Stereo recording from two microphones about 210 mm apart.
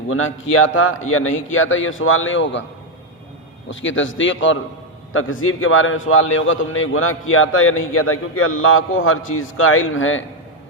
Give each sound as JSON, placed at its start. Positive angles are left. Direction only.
{"t": 0.1, "sound": "a man's voice", "side_deg": 75}
{"t": 3.7, "sound": "a man's voice", "side_deg": 65}